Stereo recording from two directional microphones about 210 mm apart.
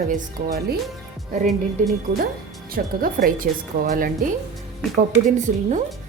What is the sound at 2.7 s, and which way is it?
Speech, 45° right (ahead or behind).